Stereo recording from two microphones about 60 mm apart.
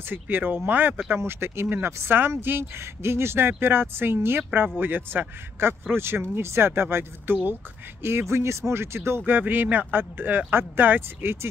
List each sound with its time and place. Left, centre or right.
0.1 s speech: right
1.1 s speech: right
9.2 s speech: right